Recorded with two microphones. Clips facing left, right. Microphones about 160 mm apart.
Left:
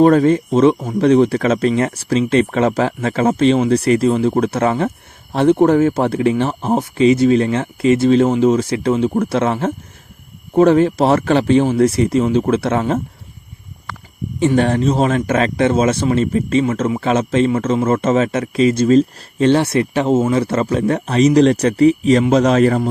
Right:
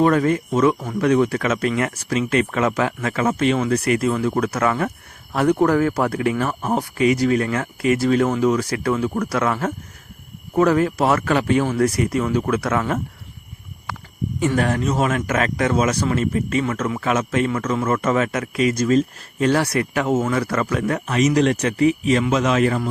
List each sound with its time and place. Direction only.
0.0 s speech: 30° left (ahead or behind)
14.3 s speech: 25° left (ahead or behind)